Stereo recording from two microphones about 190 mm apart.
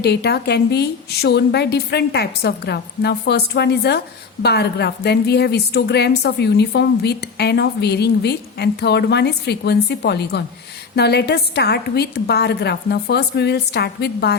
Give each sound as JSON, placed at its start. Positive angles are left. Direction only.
{"t": 0.0, "sound": "a woman's voice", "side_deg": 60}